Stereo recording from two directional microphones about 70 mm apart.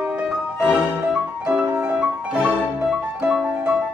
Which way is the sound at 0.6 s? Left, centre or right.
Centre.